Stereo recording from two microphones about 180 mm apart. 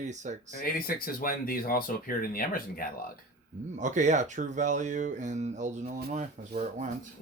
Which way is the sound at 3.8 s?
40° right (ahead or behind).